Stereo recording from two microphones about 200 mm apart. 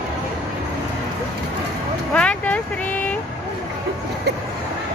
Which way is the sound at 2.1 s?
5° left (ahead or behind).